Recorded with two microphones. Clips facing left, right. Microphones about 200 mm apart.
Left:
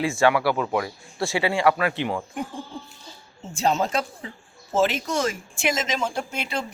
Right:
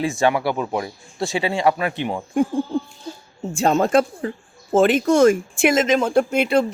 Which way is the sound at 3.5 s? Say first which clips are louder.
Right 7 dB; 50° right (ahead or behind).